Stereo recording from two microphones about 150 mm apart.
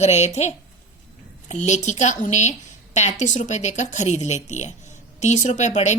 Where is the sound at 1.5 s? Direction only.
50° left (ahead or behind).